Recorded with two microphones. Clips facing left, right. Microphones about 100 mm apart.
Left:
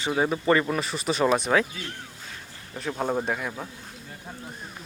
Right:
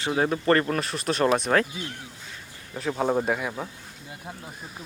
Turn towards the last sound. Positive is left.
turn(degrees=-5)  # may be behind; listen again after turning